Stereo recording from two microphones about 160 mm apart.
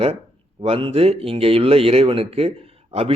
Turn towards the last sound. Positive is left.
turn(degrees=-35)  # may be behind; listen again after turning